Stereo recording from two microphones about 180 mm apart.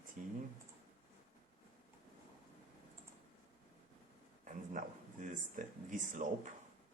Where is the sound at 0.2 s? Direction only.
50° right (ahead or behind).